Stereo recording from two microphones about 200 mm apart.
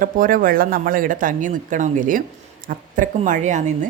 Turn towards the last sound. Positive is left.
turn(degrees=-35)  # may be behind; listen again after turning